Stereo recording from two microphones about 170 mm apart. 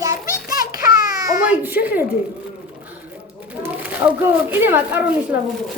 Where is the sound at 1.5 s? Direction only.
10° right (ahead or behind).